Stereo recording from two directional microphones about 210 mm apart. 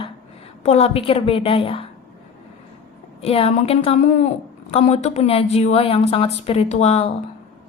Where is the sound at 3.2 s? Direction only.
25° left (ahead or behind).